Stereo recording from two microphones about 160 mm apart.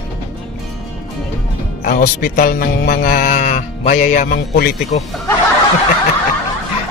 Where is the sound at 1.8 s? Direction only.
65° left (ahead or behind); by 5.1 s 45° left (ahead or behind).